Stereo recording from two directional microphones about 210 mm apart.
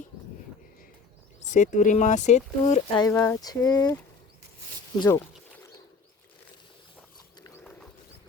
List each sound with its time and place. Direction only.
1.4 s speech: 35° left (ahead or behind)
3.0 s speech: 10° left (ahead or behind)
4.9 s speech: 15° left (ahead or behind)
7.6 s a sound: 5° left (ahead or behind)